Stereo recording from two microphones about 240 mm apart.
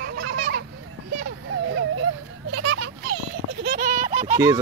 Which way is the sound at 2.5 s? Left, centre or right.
Right.